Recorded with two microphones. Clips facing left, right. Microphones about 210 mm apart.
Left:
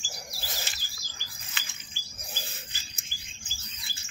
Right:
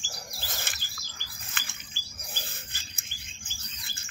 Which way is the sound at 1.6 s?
50° right (ahead or behind).